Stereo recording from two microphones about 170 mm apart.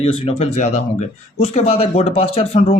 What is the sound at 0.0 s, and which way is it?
Speech, 35° left (ahead or behind).